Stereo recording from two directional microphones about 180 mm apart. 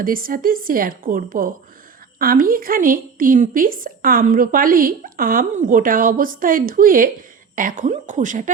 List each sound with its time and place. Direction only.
0.0 s a woman's voice: 50° right (ahead or behind)